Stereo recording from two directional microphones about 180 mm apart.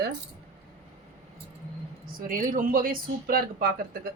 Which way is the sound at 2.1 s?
50° right (ahead or behind).